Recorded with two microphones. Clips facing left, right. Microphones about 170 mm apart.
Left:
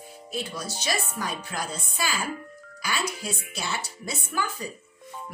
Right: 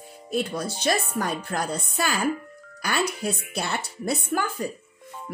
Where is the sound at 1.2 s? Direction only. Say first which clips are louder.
Right 5 dB; 60° right (ahead or behind).